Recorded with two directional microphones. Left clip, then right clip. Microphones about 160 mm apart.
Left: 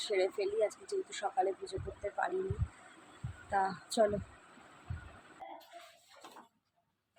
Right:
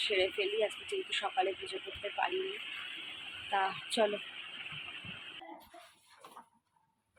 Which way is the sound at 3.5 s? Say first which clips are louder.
Even; 15° left (ahead or behind).